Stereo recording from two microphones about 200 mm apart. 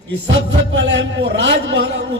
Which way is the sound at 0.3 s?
65° right (ahead or behind).